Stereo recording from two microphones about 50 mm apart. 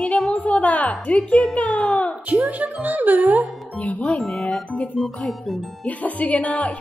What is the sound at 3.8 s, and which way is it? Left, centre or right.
Music, left.